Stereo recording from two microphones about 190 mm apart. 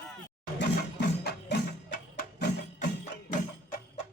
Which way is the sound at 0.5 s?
60° left (ahead or behind).